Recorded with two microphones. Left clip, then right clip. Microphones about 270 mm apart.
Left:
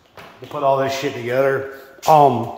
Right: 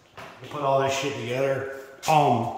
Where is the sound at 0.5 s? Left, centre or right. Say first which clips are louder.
Left 8 dB; left.